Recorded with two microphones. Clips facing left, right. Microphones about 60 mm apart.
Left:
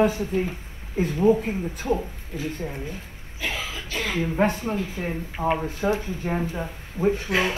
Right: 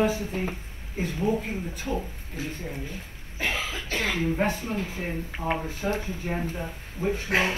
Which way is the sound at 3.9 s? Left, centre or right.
Right.